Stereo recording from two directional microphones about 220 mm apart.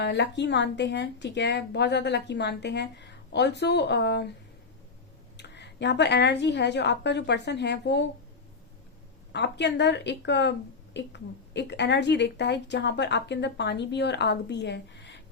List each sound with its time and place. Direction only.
0.0 s speech: 50° left (ahead or behind)
5.4 s speech: 50° left (ahead or behind)
9.3 s speech: 50° left (ahead or behind)